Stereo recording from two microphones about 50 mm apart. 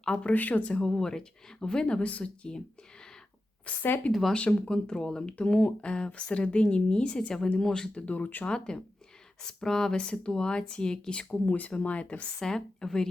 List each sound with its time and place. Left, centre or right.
0.0 s speech: centre
0.3 s speech: left
0.9 s speech: centre
3.7 s speech: left
4.1 s speech: centre
4.4 s speech: left
7.9 s speech: left
8.4 s speech: centre
11.4 s speech: left
12.4 s speech: centre